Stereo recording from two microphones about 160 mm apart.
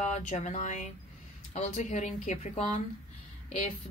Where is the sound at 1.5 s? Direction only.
45° left (ahead or behind).